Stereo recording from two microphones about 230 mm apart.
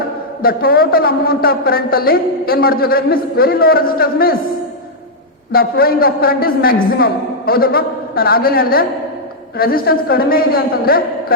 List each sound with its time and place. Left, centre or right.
0.4 s a woman's voice: left
5.5 s a woman's voice: left